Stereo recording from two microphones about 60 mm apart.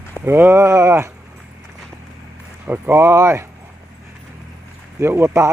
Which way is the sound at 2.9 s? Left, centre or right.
Right.